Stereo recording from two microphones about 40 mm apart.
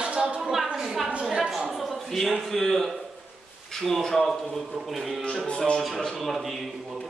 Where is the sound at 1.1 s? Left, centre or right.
Right.